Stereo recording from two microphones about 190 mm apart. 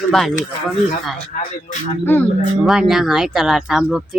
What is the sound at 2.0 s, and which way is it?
Speech, 10° left (ahead or behind).